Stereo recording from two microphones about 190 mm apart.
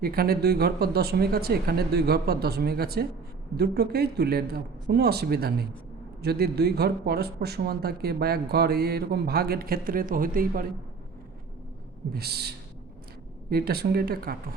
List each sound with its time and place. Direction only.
0.0 s speech: 50° right (ahead or behind)
12.1 s speech: 55° right (ahead or behind)